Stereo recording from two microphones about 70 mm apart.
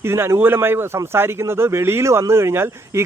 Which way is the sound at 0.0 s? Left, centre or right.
Right.